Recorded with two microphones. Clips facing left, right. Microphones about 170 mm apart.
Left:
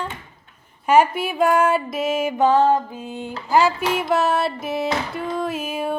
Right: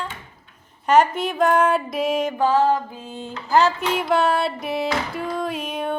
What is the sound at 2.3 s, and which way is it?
Speech, 20° left (ahead or behind).